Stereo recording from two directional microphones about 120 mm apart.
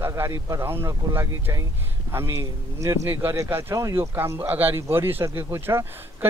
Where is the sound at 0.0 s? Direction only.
25° right (ahead or behind).